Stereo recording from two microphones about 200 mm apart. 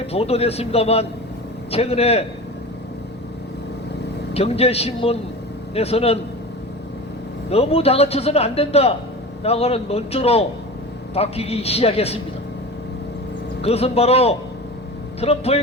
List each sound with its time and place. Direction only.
0.1 s a man's voice: 30° left (ahead or behind)
4.4 s a man's voice: 30° left (ahead or behind)
7.5 s a man's voice: 30° left (ahead or behind)
13.6 s a man's voice: 30° left (ahead or behind)